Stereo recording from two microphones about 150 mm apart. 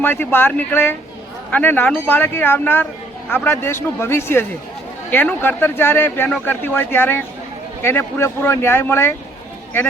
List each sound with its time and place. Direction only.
0.0 s speech: 15° left (ahead or behind)